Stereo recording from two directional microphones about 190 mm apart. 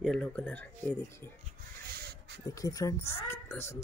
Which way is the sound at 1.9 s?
60° right (ahead or behind).